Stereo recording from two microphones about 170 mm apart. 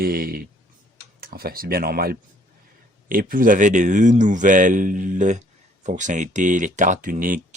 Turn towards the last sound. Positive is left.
turn(degrees=-55)  # may be behind; listen again after turning